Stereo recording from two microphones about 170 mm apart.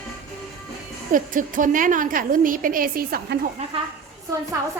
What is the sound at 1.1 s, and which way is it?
A woman's voice, 50° right (ahead or behind).